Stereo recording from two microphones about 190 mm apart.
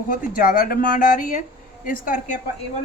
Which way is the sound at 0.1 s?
45° left (ahead or behind).